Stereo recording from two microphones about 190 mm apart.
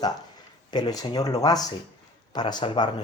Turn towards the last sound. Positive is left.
turn(degrees=25)  # may be behind; listen again after turning